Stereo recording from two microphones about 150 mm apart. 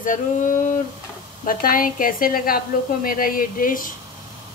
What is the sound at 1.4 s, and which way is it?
A woman's voice, 70° left (ahead or behind).